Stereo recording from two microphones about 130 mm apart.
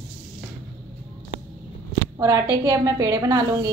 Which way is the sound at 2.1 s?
25° right (ahead or behind).